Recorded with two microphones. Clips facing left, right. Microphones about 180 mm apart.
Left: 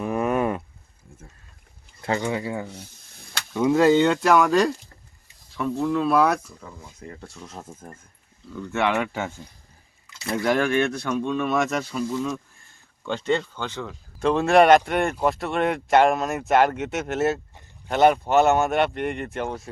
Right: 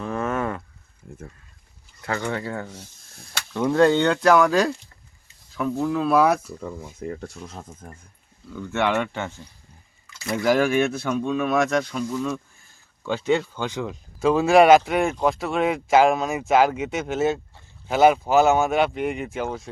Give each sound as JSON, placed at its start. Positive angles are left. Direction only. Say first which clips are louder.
{"t": 0.0, "sound": "a sound", "louder": "left 3 dB", "side_deg": 15}
{"t": 2.0, "sound": "speech", "louder": "left 2 dB", "side_deg": 20}
{"t": 7.4, "sound": "speech", "louder": "even", "side_deg": 5}
{"t": 10.3, "sound": "speech", "louder": "right 2 dB", "side_deg": -5}
{"t": 14.2, "sound": "speech", "louder": "right 1 dB", "side_deg": -5}